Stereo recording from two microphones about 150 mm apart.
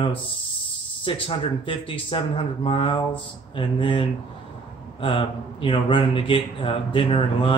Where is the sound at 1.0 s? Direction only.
35° left (ahead or behind).